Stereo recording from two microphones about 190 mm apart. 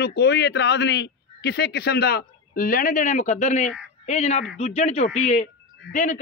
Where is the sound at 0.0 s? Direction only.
60° left (ahead or behind).